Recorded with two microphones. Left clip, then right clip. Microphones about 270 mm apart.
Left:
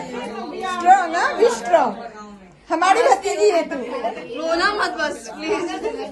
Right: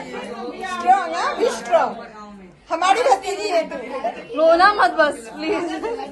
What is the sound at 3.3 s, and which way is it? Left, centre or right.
Speech, left.